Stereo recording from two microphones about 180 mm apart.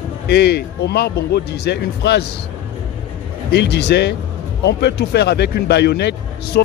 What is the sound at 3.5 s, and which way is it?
A man's voice, 70° left (ahead or behind).